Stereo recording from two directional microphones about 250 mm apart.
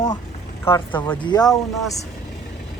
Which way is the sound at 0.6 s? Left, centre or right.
Centre.